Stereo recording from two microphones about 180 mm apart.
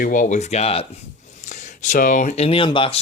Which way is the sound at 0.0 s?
45° left (ahead or behind).